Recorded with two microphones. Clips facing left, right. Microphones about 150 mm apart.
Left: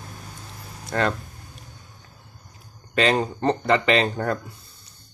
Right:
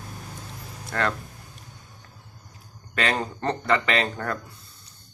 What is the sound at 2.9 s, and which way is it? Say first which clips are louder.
Speech: left 5 dB; 20° left (ahead or behind).